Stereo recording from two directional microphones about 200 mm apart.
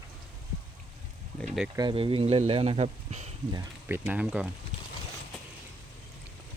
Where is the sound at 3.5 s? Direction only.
10° right (ahead or behind).